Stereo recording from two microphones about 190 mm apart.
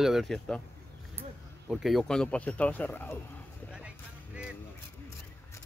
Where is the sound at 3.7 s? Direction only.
5° right (ahead or behind).